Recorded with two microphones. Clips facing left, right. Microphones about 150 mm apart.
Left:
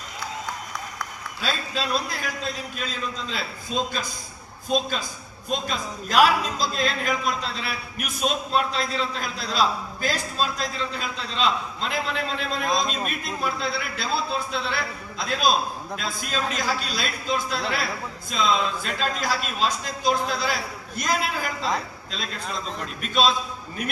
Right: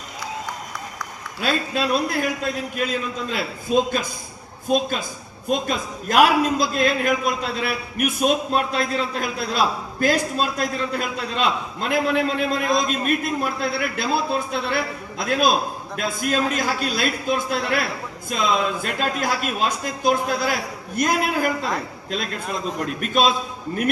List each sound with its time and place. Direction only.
1.4 s a man's voice: 55° right (ahead or behind)
12.5 s a man's voice: 5° right (ahead or behind)
13.1 s a man's voice: 50° right (ahead or behind)
23.0 s a man's voice: 50° right (ahead or behind)